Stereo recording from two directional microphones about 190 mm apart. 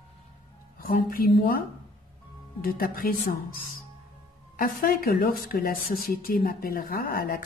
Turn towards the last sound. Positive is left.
turn(degrees=50)  # may be behind; listen again after turning